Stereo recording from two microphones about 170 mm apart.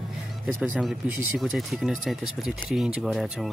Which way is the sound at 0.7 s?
5° right (ahead or behind).